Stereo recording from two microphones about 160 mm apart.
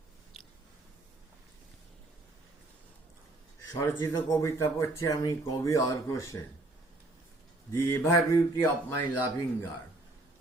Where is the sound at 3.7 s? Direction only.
20° left (ahead or behind).